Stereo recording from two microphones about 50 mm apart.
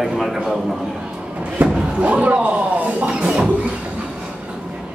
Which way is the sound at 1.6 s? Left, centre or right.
Right.